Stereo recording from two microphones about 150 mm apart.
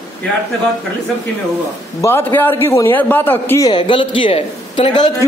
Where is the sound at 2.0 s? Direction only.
15° left (ahead or behind).